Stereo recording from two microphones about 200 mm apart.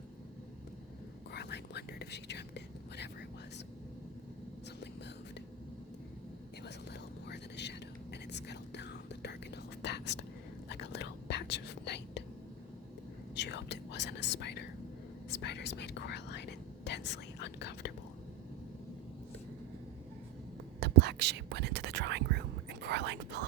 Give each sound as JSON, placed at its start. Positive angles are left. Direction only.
{"t": 1.3, "sound": "whispering", "side_deg": 55}
{"t": 6.7, "sound": "whispering", "side_deg": 60}
{"t": 13.3, "sound": "whispering", "side_deg": 60}
{"t": 20.7, "sound": "whispering", "side_deg": -55}